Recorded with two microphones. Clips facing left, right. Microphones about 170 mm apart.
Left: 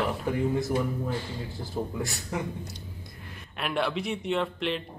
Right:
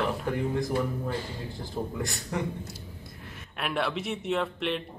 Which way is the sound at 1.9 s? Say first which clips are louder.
Even; centre (ahead or behind).